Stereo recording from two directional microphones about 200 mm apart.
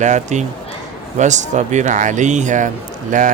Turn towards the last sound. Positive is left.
turn(degrees=-40)  # may be behind; listen again after turning